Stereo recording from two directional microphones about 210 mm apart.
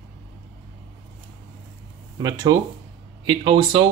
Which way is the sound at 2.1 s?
20° right (ahead or behind).